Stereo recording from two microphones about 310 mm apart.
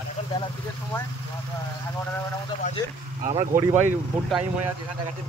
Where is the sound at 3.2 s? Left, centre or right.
Centre.